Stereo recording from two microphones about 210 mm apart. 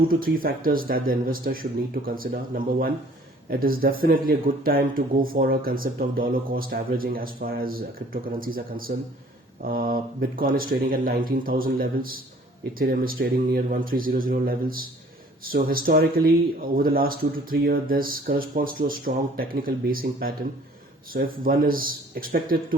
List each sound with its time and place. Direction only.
0.1 s speech: 45° right (ahead or behind)